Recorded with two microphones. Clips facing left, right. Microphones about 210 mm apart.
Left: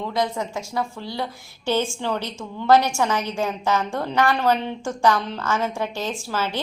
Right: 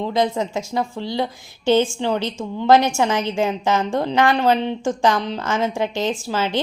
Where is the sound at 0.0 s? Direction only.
25° right (ahead or behind).